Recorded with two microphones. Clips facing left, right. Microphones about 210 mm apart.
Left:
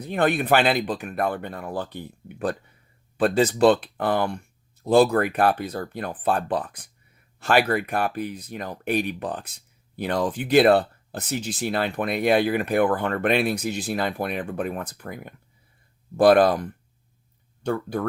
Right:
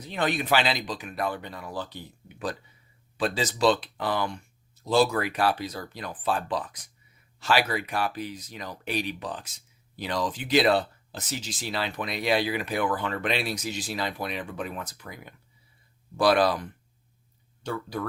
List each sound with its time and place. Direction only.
0.0 s speech: 55° left (ahead or behind)